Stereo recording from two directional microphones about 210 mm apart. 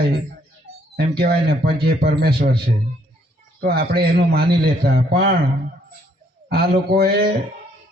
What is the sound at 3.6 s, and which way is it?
Speech, 45° right (ahead or behind).